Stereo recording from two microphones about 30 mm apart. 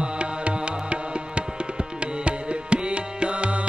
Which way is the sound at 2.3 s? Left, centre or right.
Right.